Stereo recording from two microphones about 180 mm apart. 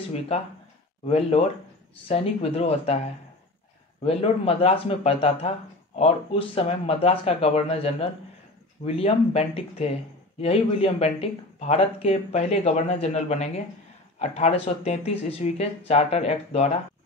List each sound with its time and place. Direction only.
0.3 s speech: 35° left (ahead or behind)
4.0 s speech: 35° left (ahead or behind)